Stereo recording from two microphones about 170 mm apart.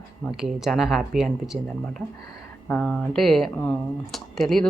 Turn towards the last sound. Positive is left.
turn(degrees=0)  # may be behind; listen again after turning